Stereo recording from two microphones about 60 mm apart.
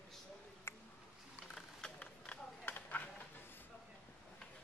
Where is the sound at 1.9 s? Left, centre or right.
Left.